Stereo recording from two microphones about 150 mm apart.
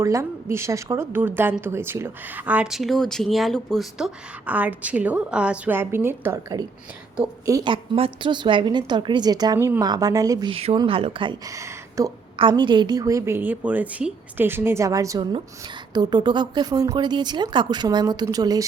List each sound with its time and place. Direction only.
0.0 s a woman's voice: 20° right (ahead or behind)
7.7 s a woman's voice: 35° right (ahead or behind)
10.5 s a woman's voice: 40° right (ahead or behind)
11.5 s speech: 20° right (ahead or behind)
12.4 s a woman's voice: 30° right (ahead or behind)